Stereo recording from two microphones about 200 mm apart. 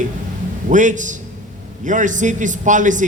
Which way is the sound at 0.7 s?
40° right (ahead or behind).